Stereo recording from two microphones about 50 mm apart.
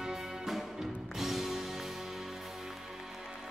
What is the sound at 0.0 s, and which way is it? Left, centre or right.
Music, centre.